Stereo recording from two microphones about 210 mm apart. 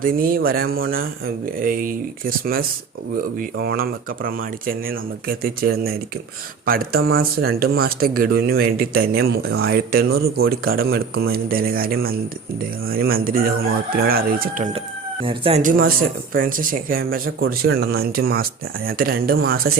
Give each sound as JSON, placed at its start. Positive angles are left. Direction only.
{"t": 0.0, "sound": "speech", "side_deg": -40}
{"t": 15.2, "sound": "speech", "side_deg": -25}
{"t": 15.6, "sound": "speech", "side_deg": -45}